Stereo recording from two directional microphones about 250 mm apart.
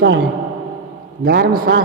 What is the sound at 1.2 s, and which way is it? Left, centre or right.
Speech, right.